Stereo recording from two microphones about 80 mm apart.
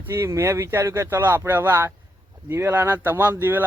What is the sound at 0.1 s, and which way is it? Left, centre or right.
Speech, right.